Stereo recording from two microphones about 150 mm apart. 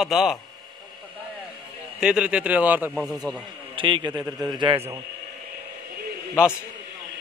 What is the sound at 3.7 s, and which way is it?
Speech, 35° right (ahead or behind).